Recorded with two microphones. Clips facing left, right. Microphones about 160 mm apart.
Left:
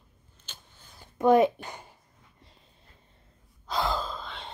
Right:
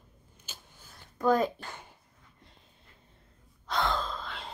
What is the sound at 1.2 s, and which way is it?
Speech, 25° left (ahead or behind).